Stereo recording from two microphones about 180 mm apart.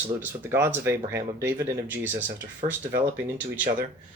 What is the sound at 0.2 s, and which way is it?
Speech, 10° right (ahead or behind).